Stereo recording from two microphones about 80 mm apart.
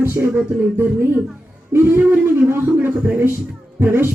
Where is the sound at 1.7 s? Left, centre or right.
Right.